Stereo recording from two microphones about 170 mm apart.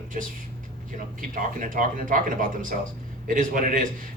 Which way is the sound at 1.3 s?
50° right (ahead or behind).